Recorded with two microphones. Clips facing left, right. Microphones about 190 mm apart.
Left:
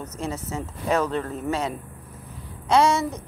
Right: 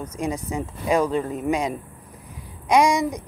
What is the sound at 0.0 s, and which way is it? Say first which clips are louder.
A woman's voice: right 3 dB; 10° right (ahead or behind).